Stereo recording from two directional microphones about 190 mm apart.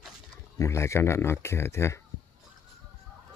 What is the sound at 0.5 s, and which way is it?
Speech, 15° left (ahead or behind).